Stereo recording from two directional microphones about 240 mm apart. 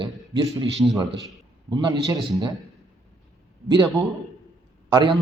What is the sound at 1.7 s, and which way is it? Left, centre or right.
Speech, centre.